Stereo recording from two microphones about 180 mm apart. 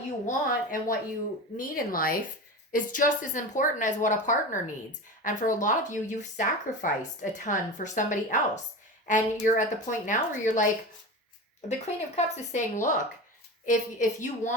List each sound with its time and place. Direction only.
0.3 s a woman's voice: 50° left (ahead or behind)
11.8 s a woman's voice: 40° left (ahead or behind)